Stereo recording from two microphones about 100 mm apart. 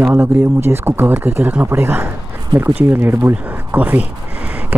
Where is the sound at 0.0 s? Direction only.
20° right (ahead or behind).